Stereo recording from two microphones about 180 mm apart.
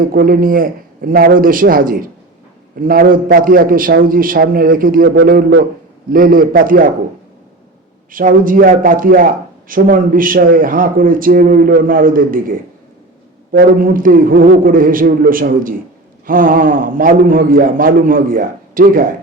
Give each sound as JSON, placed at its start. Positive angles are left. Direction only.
{"t": 0.0, "sound": "a man's voice", "side_deg": -55}
{"t": 6.1, "sound": "speech", "side_deg": -55}
{"t": 8.1, "sound": "speech", "side_deg": -50}